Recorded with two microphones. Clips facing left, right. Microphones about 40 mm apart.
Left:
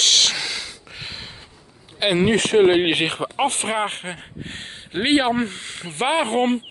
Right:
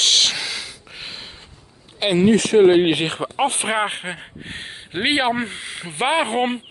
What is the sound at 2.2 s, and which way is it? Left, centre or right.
Speech, left.